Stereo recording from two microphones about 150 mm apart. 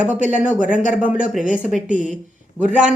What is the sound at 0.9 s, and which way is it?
Speech, 10° right (ahead or behind).